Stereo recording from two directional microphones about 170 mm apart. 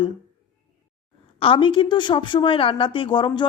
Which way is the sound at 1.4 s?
30° left (ahead or behind).